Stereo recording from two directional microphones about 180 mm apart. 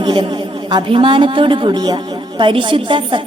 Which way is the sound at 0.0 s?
25° right (ahead or behind).